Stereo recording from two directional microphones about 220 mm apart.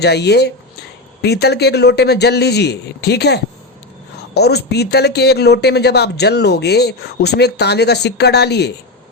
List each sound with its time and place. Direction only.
0.0 s speech: 50° left (ahead or behind)